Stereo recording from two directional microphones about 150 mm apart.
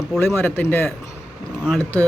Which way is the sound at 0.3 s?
15° left (ahead or behind).